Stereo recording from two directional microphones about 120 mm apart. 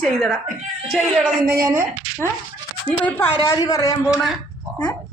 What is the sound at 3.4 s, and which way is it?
Speech, 35° left (ahead or behind).